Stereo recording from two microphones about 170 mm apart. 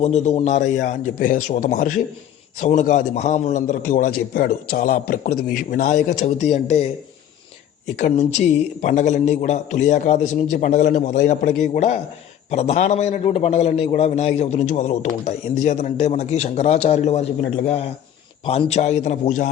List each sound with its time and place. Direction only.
0.0 s a man's voice: 40° left (ahead or behind)
7.9 s a man's voice: 45° left (ahead or behind)
18.4 s a man's voice: 40° left (ahead or behind)